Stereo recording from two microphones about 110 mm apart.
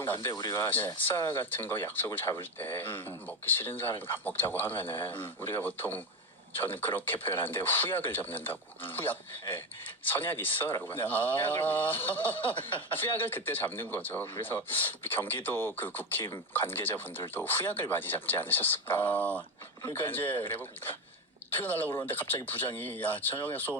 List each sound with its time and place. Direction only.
0.0 s speech: 20° left (ahead or behind)